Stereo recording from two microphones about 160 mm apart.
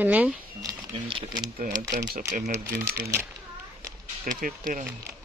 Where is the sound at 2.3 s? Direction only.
60° right (ahead or behind).